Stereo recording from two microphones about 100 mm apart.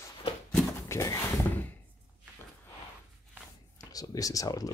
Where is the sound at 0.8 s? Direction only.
30° left (ahead or behind).